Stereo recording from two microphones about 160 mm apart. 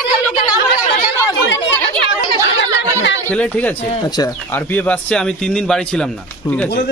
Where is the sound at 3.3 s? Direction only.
10° left (ahead or behind).